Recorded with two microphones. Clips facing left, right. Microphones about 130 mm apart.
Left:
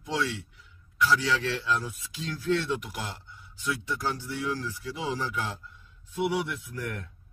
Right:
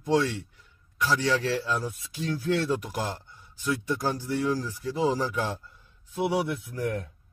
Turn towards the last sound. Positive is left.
turn(degrees=-25)  # may be behind; listen again after turning